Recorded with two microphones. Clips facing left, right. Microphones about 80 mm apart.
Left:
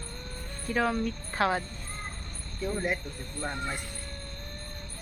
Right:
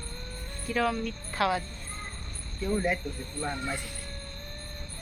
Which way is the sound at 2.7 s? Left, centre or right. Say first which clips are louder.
Right 3 dB; centre.